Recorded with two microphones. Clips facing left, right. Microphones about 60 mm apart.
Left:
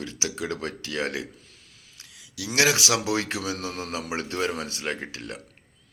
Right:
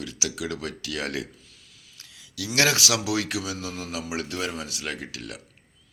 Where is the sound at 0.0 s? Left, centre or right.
Left.